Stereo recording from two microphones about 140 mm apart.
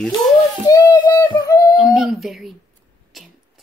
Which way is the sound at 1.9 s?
Centre (ahead or behind).